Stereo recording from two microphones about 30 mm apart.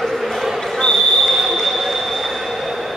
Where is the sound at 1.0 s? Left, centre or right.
Centre.